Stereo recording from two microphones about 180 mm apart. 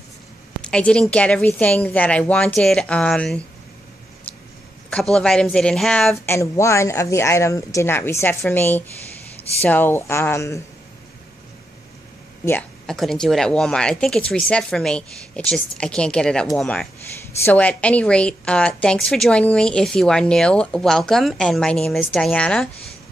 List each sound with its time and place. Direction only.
0.6 s a woman's voice: 5° left (ahead or behind)
5.1 s a woman's voice: 5° left (ahead or behind)
6.3 s a woman's voice: 15° left (ahead or behind)
12.4 s a woman's voice: 5° left (ahead or behind)